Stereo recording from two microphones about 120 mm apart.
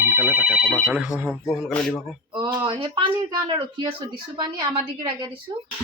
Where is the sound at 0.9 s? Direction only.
15° right (ahead or behind).